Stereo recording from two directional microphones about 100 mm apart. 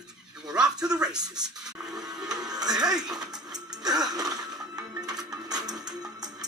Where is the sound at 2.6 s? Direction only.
40° right (ahead or behind).